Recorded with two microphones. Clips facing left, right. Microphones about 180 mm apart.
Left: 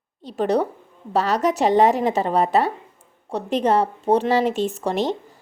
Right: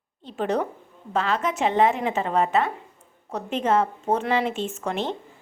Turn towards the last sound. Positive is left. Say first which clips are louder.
# left 5 dB
turn(degrees=40)  # may be behind; listen again after turning